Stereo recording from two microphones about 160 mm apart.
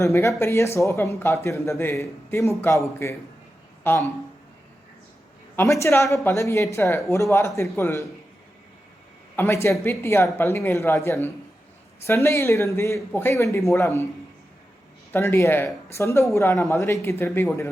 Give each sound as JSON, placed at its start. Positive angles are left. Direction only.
{"t": 0.0, "sound": "speech", "side_deg": 20}
{"t": 5.8, "sound": "a woman's voice", "side_deg": 20}
{"t": 9.3, "sound": "speech", "side_deg": 15}
{"t": 15.1, "sound": "speech", "side_deg": 15}